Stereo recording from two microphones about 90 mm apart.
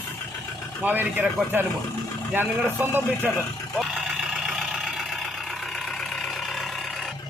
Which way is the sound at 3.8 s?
Centre (ahead or behind).